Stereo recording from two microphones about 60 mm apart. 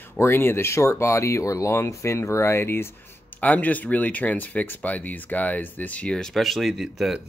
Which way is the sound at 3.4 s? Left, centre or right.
Left.